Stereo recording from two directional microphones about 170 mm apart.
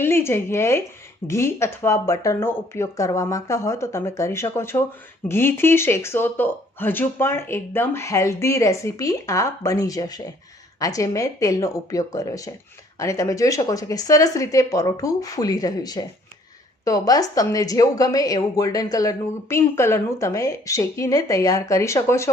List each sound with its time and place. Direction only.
0.0 s a woman's voice: 15° left (ahead or behind)